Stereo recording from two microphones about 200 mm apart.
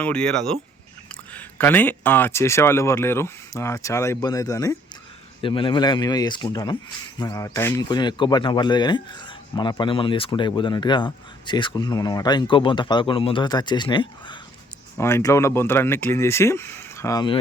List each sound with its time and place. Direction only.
0.0 s speech: 5° left (ahead or behind); by 14.3 s 25° left (ahead or behind)
14.9 s speech: 15° left (ahead or behind)